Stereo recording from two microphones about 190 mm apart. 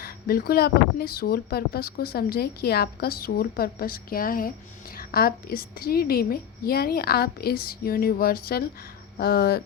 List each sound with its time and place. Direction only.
0.0 s speech: 50° left (ahead or behind)